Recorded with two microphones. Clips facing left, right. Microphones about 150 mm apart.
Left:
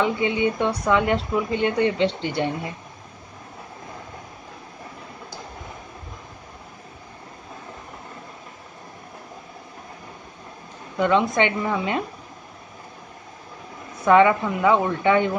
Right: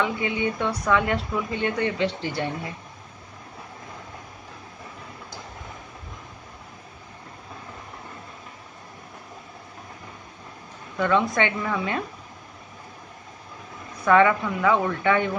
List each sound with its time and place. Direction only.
0.0 s a woman's voice: 25° left (ahead or behind)
11.0 s a woman's voice: 25° left (ahead or behind)
14.0 s a woman's voice: 20° left (ahead or behind)